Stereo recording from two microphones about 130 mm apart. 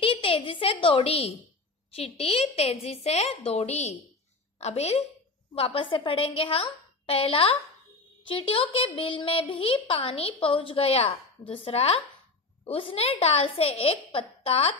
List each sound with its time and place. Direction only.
0.0 s a woman's voice: 45° left (ahead or behind)
5.6 s a woman's voice: 40° left (ahead or behind)